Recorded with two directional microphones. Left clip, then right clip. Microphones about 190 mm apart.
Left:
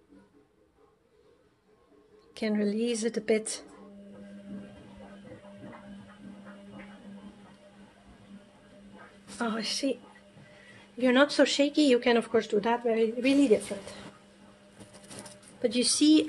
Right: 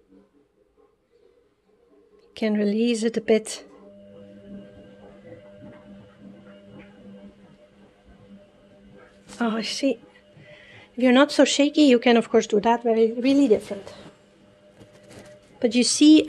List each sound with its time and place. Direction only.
2.3 s speech: 50° right (ahead or behind)
9.4 s speech: 50° right (ahead or behind)
11.0 s speech: 50° right (ahead or behind)
15.6 s speech: 50° right (ahead or behind)